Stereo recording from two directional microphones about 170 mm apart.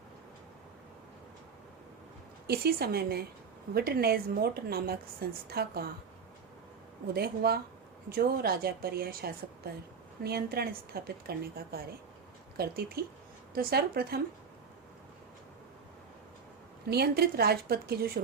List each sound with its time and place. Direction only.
2.5 s a woman's voice: 65° right (ahead or behind)
7.1 s a woman's voice: 65° right (ahead or behind)
16.9 s a woman's voice: 70° right (ahead or behind)